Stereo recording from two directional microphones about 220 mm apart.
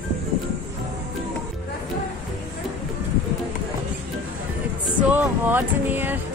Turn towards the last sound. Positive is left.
turn(degrees=-10)  # may be behind; listen again after turning